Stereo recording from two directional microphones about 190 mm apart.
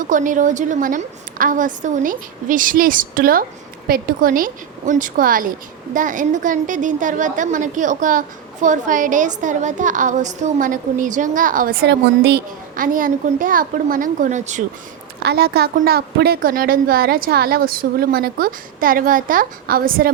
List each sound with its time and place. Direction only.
0.0 s a woman's voice: 45° right (ahead or behind)
15.2 s a woman's voice: 55° right (ahead or behind)